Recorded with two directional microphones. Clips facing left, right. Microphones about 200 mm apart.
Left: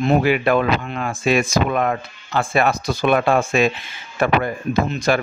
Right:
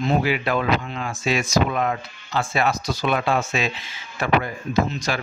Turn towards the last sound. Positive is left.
turn(degrees=55)  # may be behind; listen again after turning